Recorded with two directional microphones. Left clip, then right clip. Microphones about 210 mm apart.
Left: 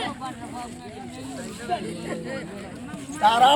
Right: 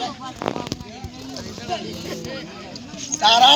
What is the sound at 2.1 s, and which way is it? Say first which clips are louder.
Vehicle: even; 50° left (ahead or behind).